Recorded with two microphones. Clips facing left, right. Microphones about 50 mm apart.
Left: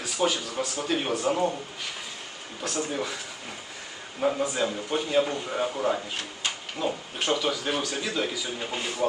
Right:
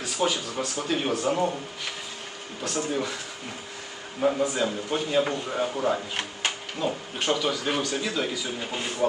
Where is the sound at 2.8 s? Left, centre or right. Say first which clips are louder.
Right 2 dB; centre.